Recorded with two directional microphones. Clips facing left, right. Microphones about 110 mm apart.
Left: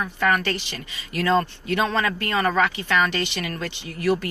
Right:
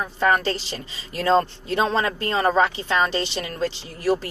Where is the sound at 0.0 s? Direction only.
30° right (ahead or behind).